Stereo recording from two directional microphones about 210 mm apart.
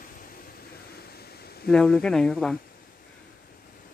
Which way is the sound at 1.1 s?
50° left (ahead or behind).